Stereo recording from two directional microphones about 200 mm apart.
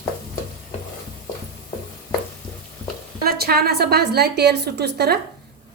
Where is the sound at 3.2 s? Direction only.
50° right (ahead or behind).